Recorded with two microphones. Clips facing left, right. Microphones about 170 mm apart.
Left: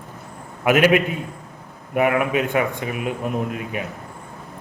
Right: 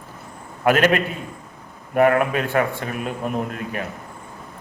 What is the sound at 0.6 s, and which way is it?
A man's voice, 10° left (ahead or behind).